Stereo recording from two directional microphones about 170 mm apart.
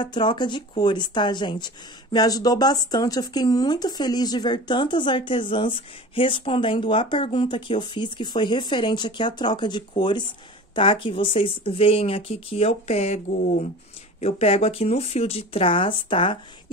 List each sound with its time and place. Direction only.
0.0 s speech: 30° left (ahead or behind)